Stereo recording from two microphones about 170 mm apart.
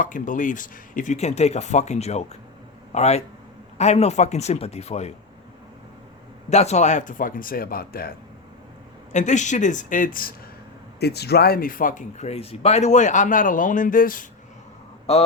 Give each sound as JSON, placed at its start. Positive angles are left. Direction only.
{"t": 0.0, "sound": "speech", "side_deg": 50}
{"t": 6.5, "sound": "speech", "side_deg": 40}
{"t": 9.1, "sound": "speech", "side_deg": 45}
{"t": 11.0, "sound": "speech", "side_deg": 70}